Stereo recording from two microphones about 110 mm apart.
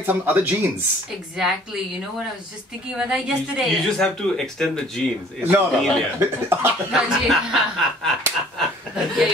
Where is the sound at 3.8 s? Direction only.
5° left (ahead or behind).